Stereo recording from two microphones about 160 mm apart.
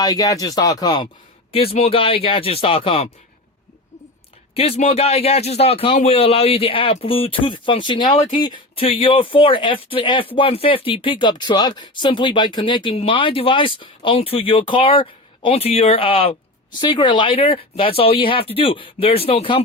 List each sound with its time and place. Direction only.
0.0 s speech: 25° left (ahead or behind)
1.7 s speech: 40° left (ahead or behind)
4.5 s speech: 40° left (ahead or behind)